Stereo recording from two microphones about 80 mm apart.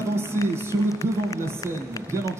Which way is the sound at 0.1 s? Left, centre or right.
Right.